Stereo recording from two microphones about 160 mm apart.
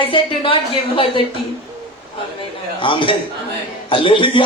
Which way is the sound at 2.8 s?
30° left (ahead or behind).